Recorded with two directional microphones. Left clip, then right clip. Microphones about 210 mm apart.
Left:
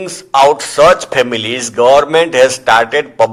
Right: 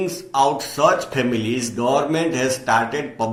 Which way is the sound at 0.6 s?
50° left (ahead or behind).